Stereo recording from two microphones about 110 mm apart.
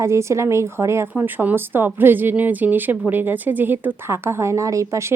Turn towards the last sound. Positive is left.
turn(degrees=-30)  # may be behind; listen again after turning